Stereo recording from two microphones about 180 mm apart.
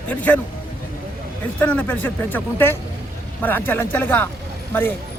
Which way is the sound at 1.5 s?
5° left (ahead or behind).